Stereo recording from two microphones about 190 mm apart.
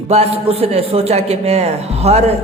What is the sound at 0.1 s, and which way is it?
A man's voice, 30° right (ahead or behind).